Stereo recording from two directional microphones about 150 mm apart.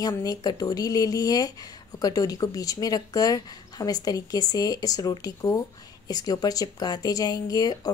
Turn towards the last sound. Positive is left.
turn(degrees=25)  # may be behind; listen again after turning